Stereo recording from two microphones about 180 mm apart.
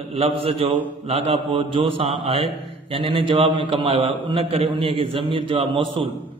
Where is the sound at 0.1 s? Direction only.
35° right (ahead or behind).